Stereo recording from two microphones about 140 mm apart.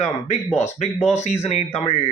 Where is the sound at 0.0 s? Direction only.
55° left (ahead or behind).